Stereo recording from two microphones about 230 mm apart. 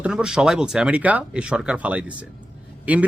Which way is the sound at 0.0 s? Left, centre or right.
Centre.